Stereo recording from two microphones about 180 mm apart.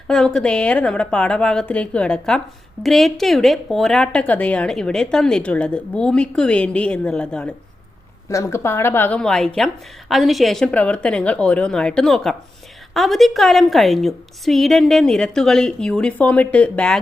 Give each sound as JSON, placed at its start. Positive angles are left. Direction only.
{"t": 0.1, "sound": "a woman's voice", "side_deg": 5}
{"t": 8.3, "sound": "a woman's voice", "side_deg": 15}